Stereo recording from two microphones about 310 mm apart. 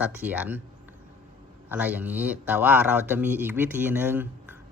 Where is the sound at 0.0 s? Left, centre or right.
Centre.